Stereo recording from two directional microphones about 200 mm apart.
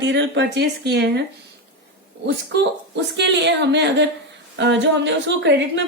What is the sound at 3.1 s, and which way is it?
A woman's voice, 60° right (ahead or behind).